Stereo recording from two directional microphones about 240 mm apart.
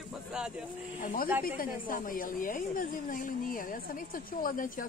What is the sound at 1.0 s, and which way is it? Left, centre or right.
A woman's voice, left.